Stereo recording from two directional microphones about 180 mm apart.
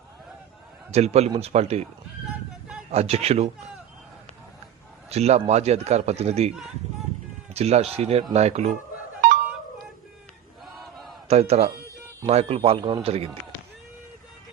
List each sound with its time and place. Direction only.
0.9 s a man's voice: 35° right (ahead or behind)
2.9 s a man's voice: 35° right (ahead or behind)
5.0 s a man's voice: 35° right (ahead or behind)
7.5 s a man's voice: 35° right (ahead or behind)
11.3 s a man's voice: 35° right (ahead or behind)